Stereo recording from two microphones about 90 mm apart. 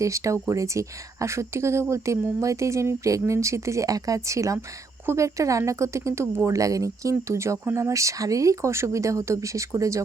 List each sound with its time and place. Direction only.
0.0 s speech: 35° right (ahead or behind)